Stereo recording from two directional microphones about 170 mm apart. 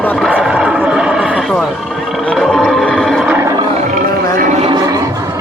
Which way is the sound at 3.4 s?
20° right (ahead or behind).